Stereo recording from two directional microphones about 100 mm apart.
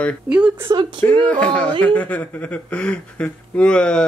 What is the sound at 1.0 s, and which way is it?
Speech, 15° left (ahead or behind).